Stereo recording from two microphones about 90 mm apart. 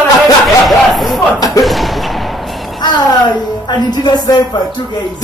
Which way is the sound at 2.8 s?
50° left (ahead or behind).